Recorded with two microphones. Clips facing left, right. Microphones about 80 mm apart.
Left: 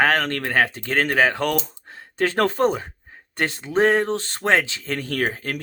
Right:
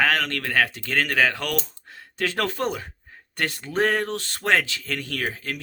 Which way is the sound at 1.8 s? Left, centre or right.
Left.